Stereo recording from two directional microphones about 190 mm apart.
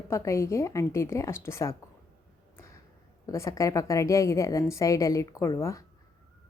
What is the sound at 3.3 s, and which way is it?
A woman's voice, 15° left (ahead or behind).